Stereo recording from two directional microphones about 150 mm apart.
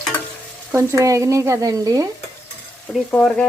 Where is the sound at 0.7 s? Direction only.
20° right (ahead or behind).